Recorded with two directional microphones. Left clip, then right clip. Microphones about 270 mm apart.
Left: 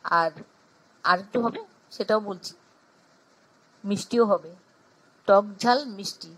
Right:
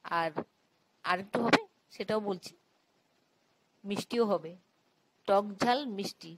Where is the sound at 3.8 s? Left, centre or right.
Right.